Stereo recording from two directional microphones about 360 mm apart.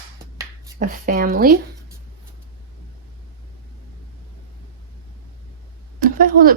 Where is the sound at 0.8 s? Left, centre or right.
Right.